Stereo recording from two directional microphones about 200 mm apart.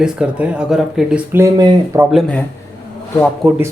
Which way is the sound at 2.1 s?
5° left (ahead or behind).